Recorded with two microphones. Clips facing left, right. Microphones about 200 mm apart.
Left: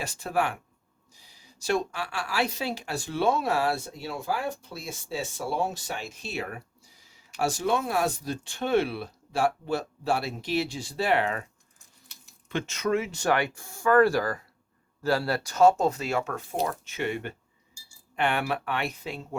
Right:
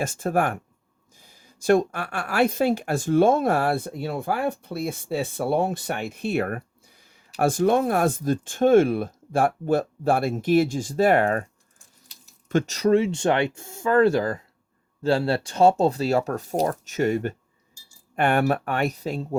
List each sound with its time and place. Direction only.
0.0 s speech: 50° right (ahead or behind)
12.5 s speech: 40° right (ahead or behind)